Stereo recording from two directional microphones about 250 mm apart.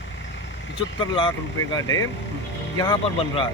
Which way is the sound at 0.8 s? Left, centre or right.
Centre.